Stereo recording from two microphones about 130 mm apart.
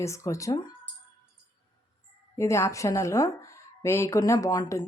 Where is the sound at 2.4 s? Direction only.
20° left (ahead or behind).